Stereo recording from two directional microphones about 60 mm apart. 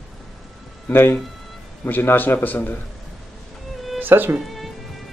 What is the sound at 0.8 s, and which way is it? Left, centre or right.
A man's voice, left.